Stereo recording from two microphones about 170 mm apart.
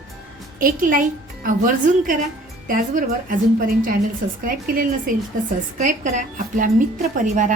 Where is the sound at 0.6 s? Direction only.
55° right (ahead or behind).